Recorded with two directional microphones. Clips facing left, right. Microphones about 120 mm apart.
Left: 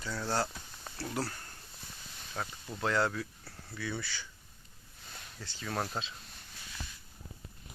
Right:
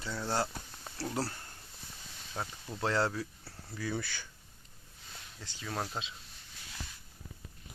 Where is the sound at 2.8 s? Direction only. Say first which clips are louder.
Even; 30° right (ahead or behind); by 4.3 s 50° right (ahead or behind).